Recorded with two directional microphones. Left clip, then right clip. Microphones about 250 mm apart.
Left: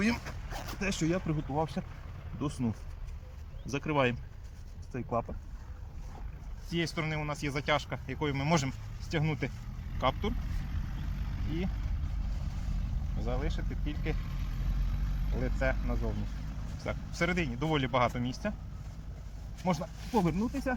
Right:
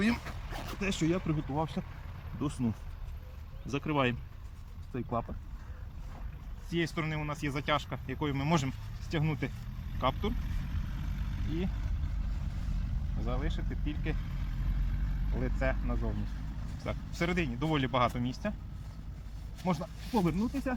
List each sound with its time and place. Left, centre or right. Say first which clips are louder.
0.0 s speech: even; centre
6.7 s speech: even; centre
10.6 s vehicle: even; right
13.2 s speech: left 1 dB; centre
14.9 s vehicle: left 1 dB; left
15.4 s speech: left 1 dB; centre
19.6 s speech: left 2 dB; centre